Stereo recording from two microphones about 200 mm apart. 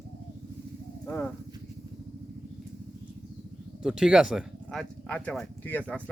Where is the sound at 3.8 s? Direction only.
5° right (ahead or behind).